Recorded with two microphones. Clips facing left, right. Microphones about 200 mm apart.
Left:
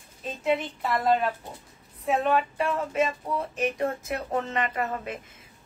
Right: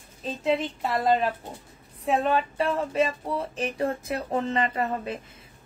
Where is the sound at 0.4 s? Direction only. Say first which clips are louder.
Right 1 dB; 30° right (ahead or behind).